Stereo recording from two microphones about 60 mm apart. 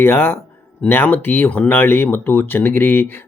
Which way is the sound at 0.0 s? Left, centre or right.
Left.